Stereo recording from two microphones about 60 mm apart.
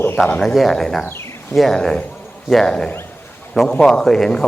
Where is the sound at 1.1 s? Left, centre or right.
Left.